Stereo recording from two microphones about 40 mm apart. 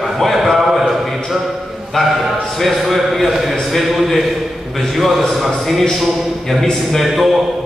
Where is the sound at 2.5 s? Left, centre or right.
Centre.